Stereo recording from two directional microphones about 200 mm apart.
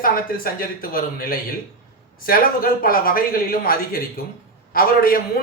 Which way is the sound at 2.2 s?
45° left (ahead or behind).